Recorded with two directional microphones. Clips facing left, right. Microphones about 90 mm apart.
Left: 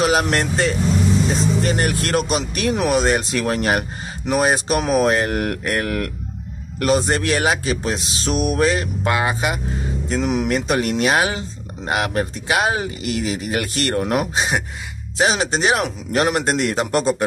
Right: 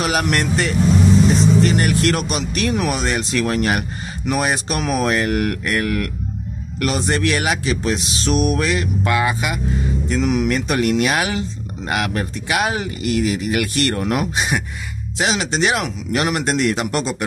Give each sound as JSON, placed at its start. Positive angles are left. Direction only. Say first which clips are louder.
{"t": 0.0, "sound": "speech", "louder": "left 2 dB", "side_deg": 30}